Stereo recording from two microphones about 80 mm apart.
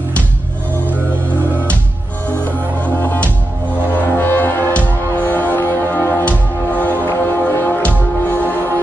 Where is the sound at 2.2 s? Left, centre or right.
Left.